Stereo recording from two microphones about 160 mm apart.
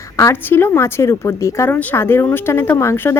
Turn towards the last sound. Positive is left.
turn(degrees=15)  # may be behind; listen again after turning